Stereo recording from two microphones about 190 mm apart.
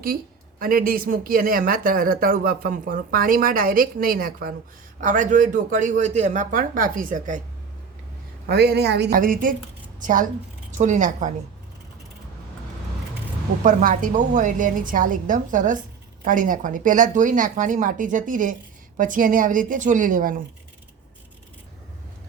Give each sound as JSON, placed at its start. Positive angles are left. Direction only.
{"t": 0.6, "sound": "speech", "side_deg": -50}
{"t": 8.4, "sound": "a woman's voice", "side_deg": -60}
{"t": 13.6, "sound": "speech", "side_deg": -45}